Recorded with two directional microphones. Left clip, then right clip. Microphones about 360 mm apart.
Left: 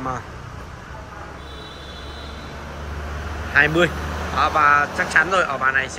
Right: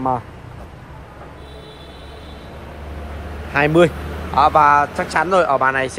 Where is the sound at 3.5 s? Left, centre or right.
Centre.